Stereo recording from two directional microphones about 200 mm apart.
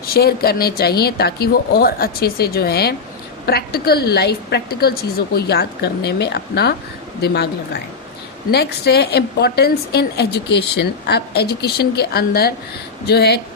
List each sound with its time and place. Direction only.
0.0 s a woman's voice: 50° left (ahead or behind)